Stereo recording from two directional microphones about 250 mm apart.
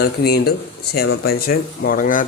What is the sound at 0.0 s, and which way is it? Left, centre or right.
Speech, left.